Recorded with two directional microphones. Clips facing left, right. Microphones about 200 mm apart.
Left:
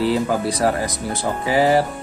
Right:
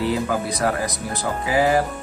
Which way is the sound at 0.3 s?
30° left (ahead or behind).